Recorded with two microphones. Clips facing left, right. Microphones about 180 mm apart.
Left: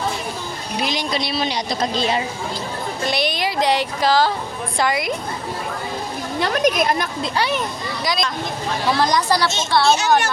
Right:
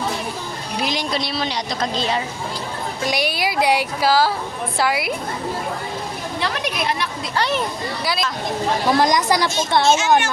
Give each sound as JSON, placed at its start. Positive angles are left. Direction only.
{"t": 0.8, "sound": "speech", "side_deg": 0}
{"t": 2.0, "sound": "speech", "side_deg": 15}
{"t": 3.0, "sound": "a woman's voice", "side_deg": -10}
{"t": 6.4, "sound": "speech", "side_deg": 40}
{"t": 8.0, "sound": "a woman's voice", "side_deg": -5}
{"t": 9.0, "sound": "a woman's voice", "side_deg": -15}
{"t": 9.8, "sound": "a woman's voice", "side_deg": 35}